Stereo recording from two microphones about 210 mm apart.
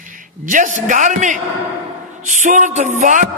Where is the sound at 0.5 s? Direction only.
40° right (ahead or behind).